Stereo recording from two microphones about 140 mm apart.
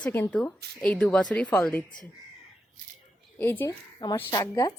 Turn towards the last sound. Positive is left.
turn(degrees=25)  # may be behind; listen again after turning